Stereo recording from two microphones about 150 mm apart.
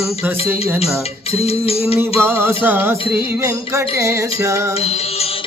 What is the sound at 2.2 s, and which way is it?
Music, 15° right (ahead or behind).